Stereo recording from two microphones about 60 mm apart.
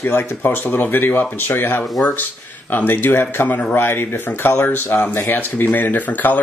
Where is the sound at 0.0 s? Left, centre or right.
Left.